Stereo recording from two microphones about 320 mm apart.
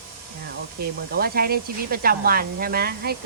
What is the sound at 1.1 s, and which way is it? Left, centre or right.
Speech, right.